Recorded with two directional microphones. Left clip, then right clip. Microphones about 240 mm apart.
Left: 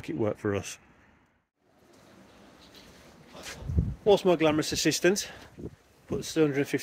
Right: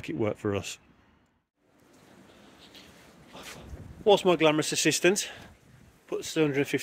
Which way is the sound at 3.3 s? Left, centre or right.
Centre.